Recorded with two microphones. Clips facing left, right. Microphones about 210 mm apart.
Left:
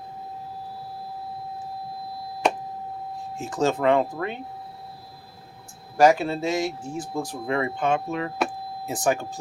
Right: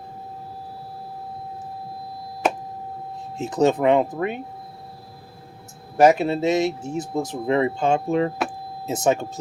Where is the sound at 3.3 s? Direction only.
20° right (ahead or behind).